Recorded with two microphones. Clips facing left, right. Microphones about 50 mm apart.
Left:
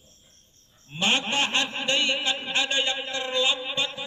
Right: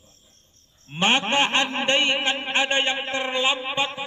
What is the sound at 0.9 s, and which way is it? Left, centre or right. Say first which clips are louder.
Speech: right 4 dB; right.